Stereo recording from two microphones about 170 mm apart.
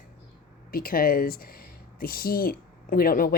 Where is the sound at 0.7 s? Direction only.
60° left (ahead or behind).